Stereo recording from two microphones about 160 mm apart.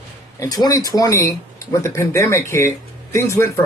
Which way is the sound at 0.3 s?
25° left (ahead or behind).